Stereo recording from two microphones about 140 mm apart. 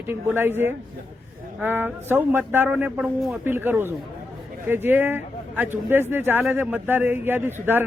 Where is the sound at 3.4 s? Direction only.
15° right (ahead or behind).